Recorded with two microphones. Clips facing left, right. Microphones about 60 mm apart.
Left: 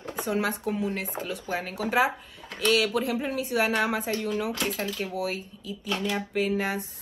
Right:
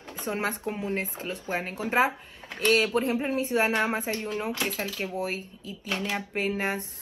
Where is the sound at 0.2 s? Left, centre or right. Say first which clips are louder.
Left 2 dB; right.